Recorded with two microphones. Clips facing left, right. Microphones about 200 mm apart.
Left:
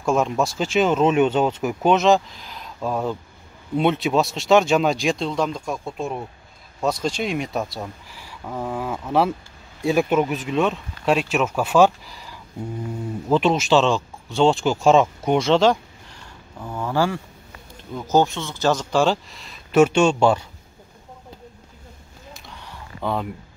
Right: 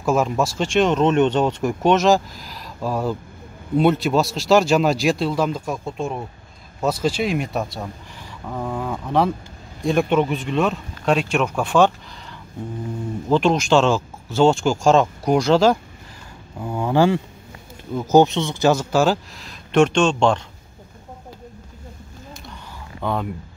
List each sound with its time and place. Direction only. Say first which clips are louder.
0.0 s speech: right 1 dB; 5° right (ahead or behind)
16.5 s speech: right 4 dB; 15° right (ahead or behind); by 20.4 s 5° left (ahead or behind)
23.0 s speech: right 1 dB; centre (ahead or behind)